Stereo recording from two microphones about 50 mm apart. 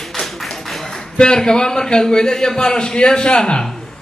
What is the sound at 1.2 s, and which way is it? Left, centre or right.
A man's voice, centre.